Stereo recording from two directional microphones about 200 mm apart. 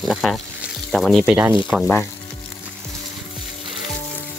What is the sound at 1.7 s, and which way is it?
Speech, 5° left (ahead or behind).